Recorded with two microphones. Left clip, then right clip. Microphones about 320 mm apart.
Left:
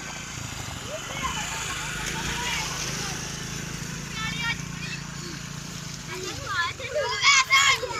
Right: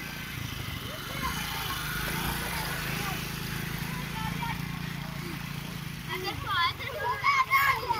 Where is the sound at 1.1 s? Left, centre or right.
Centre.